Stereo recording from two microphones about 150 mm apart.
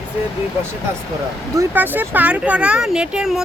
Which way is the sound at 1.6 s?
10° right (ahead or behind).